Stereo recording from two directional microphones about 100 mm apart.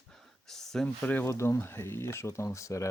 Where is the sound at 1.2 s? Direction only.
30° left (ahead or behind).